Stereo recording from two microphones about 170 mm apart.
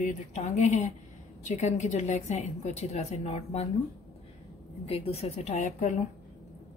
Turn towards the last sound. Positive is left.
turn(degrees=45)  # may be behind; listen again after turning